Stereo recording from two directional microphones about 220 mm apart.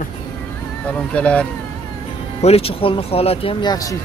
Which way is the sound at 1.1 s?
5° left (ahead or behind).